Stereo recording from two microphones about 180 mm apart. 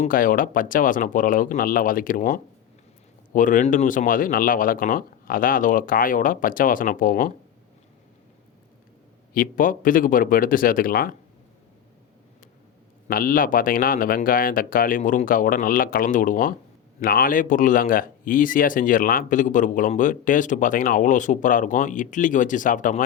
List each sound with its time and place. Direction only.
0.0 s speech: 50° left (ahead or behind)
9.3 s speech: 50° left (ahead or behind)
13.1 s speech: 50° left (ahead or behind)